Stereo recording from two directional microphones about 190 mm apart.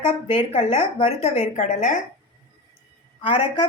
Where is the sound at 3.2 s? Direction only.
30° left (ahead or behind).